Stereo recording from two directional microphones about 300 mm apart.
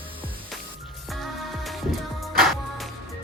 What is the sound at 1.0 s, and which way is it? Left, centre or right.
Music, centre.